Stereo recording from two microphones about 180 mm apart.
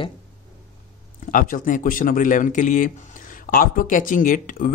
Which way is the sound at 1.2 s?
50° left (ahead or behind).